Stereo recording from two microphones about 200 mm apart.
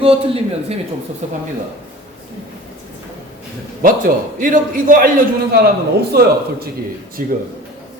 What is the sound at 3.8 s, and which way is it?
A man's voice, 45° right (ahead or behind).